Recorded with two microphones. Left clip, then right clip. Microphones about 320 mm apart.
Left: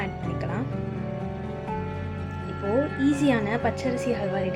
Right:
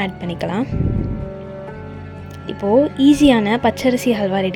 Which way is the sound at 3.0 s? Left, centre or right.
Right.